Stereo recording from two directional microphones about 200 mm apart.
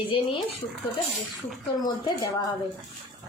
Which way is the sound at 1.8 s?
20° left (ahead or behind).